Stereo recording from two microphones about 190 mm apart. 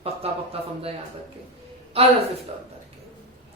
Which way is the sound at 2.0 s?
30° right (ahead or behind).